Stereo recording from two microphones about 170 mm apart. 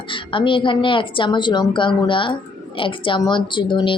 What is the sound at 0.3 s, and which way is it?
Speech, 30° left (ahead or behind).